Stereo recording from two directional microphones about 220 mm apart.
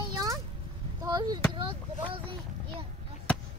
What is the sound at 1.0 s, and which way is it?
Speech, 20° right (ahead or behind).